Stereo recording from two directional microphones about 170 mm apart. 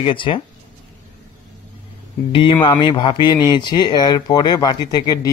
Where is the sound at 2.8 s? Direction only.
25° left (ahead or behind).